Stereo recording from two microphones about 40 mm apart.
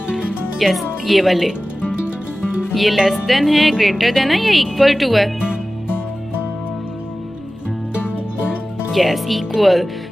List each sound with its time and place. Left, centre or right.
0.6 s speech: centre
2.7 s speech: centre
8.9 s speech: centre